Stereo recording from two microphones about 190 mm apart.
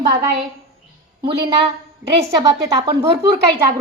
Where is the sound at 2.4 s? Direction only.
20° right (ahead or behind).